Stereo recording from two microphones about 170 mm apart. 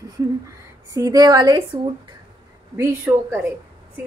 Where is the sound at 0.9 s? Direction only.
20° right (ahead or behind).